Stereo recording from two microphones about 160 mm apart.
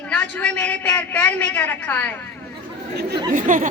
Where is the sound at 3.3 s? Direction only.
55° right (ahead or behind).